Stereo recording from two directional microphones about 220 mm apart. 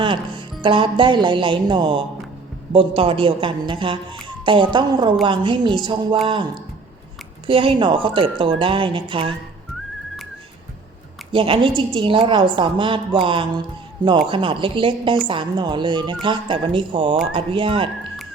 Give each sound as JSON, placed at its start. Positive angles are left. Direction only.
{"t": 0.0, "sound": "music", "side_deg": -20}
{"t": 0.6, "sound": "a woman's voice", "side_deg": -20}
{"t": 11.3, "sound": "a woman's voice", "side_deg": -25}